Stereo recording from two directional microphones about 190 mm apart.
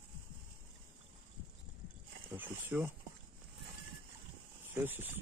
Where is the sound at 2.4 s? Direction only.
10° right (ahead or behind).